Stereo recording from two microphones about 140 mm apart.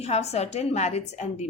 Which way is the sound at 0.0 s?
50° left (ahead or behind).